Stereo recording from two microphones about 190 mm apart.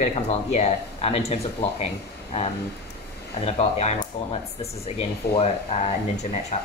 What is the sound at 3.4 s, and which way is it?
Speech, 35° left (ahead or behind).